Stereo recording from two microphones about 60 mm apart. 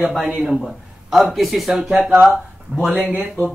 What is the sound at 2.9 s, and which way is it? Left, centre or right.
Speech, right.